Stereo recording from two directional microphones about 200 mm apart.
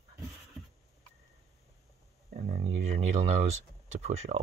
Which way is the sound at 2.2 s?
45° right (ahead or behind).